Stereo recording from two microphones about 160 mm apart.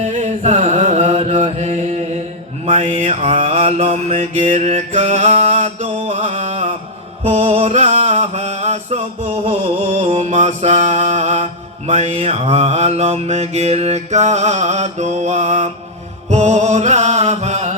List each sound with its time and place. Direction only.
0.0 s chant: 50° right (ahead or behind)
2.7 s mantra: 50° right (ahead or behind)
3.2 s mantra: 35° right (ahead or behind)
4.4 s mantra: 55° right (ahead or behind)
16.3 s music: 45° right (ahead or behind)